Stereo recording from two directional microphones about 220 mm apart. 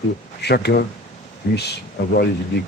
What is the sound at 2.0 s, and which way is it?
Speech, 50° left (ahead or behind).